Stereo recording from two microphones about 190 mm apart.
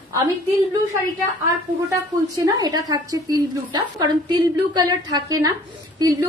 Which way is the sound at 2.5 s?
20° right (ahead or behind).